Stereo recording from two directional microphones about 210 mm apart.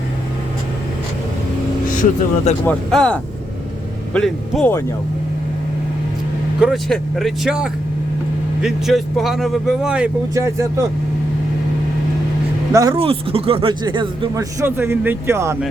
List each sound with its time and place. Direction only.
2.0 s speech: 35° left (ahead or behind)
2.6 s speech: 5° left (ahead or behind)
6.6 s speech: centre (ahead or behind)
10.3 s speech: 15° right (ahead or behind)
12.7 s speech: 15° right (ahead or behind)
13.0 s speech: 25° right (ahead or behind)
14.6 s speech: 10° right (ahead or behind)